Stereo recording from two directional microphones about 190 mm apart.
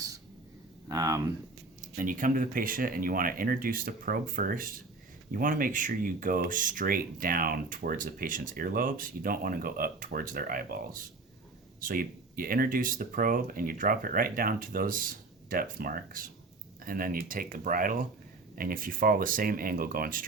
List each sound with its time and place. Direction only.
0.9 s speech: 20° right (ahead or behind)
2.0 s speech: 45° right (ahead or behind)